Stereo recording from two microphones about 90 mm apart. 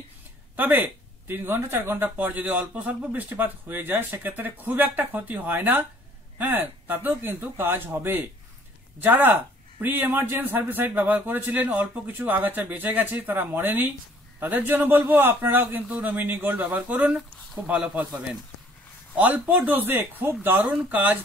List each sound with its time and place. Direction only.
0.6 s a man's voice: 20° right (ahead or behind)
19.1 s a man's voice: 20° right (ahead or behind)